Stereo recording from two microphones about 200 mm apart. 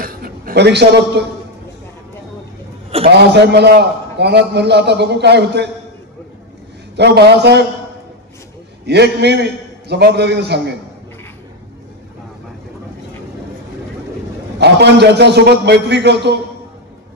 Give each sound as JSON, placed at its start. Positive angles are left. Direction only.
{"t": 0.0, "sound": "a sound", "side_deg": -45}
{"t": 3.1, "sound": "a man's voice", "side_deg": -55}
{"t": 7.0, "sound": "a man's voice", "side_deg": -55}
{"t": 8.8, "sound": "a man's voice", "side_deg": -55}
{"t": 14.6, "sound": "a man's voice", "side_deg": -55}